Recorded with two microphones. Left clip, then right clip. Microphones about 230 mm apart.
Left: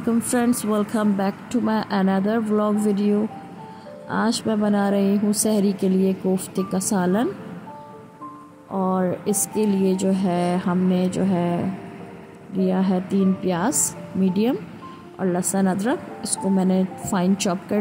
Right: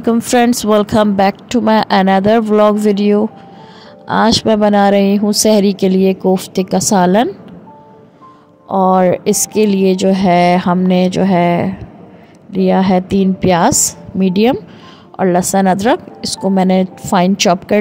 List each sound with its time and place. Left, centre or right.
0.0 s speech: right
8.6 s speech: right